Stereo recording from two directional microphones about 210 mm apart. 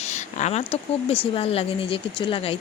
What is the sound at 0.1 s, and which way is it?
Speech, 35° left (ahead or behind).